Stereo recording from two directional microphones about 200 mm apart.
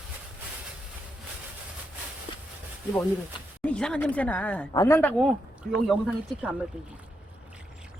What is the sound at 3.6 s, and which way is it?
Speech, 5° left (ahead or behind).